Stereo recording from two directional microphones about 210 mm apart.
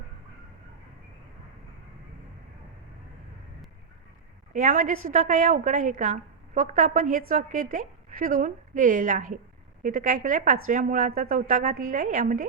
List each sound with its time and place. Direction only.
4.5 s a woman's voice: 40° right (ahead or behind)